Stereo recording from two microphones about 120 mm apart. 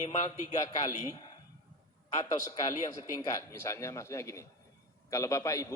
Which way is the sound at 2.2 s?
30° left (ahead or behind).